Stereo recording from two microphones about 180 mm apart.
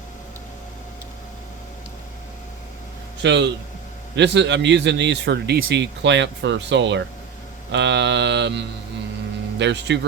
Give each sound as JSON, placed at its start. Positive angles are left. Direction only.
{"t": 3.2, "sound": "a man's voice", "side_deg": -75}